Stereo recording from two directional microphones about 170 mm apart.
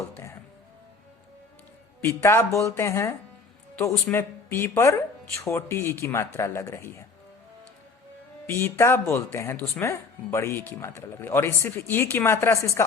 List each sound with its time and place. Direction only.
2.0 s speech: 15° left (ahead or behind)
8.4 s speech: 15° left (ahead or behind)